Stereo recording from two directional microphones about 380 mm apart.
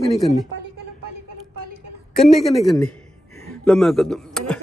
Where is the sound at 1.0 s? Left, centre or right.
Right.